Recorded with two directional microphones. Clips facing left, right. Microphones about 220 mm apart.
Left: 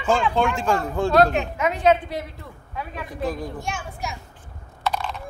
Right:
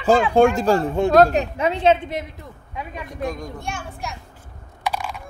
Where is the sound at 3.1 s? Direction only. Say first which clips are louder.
Left 1 dB; 5° left (ahead or behind).